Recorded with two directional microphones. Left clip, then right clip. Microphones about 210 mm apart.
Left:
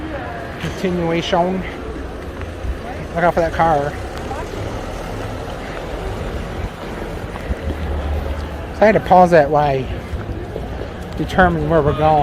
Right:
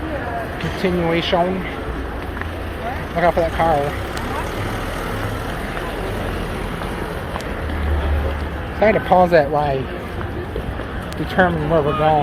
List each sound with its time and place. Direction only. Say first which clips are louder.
0.8 s speech: right 1 dB; 20° left (ahead or behind)
3.2 s speech: left 2 dB; 25° left (ahead or behind)
8.8 s speech: left 3 dB; 30° left (ahead or behind)
11.3 s speech: left 2 dB; 30° left (ahead or behind)